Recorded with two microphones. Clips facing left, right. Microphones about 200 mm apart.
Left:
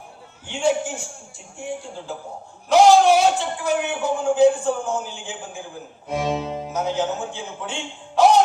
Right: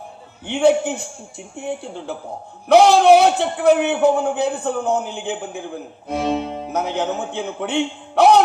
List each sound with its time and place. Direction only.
0.4 s a man's voice: 60° right (ahead or behind)